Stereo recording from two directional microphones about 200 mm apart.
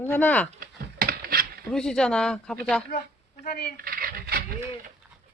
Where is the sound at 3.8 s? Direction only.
50° right (ahead or behind).